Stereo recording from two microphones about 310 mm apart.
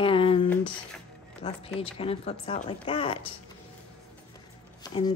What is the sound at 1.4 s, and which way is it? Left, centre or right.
Speech, centre.